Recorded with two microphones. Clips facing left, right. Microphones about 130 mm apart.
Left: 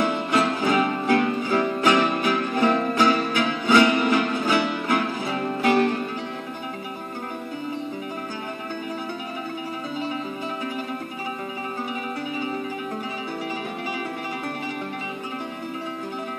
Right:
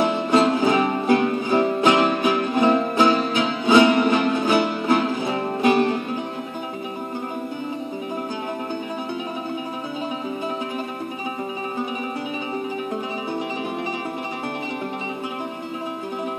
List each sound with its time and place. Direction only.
0.0 s music: 25° right (ahead or behind)